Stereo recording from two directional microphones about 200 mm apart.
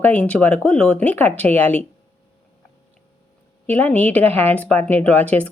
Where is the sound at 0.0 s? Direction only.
5° left (ahead or behind).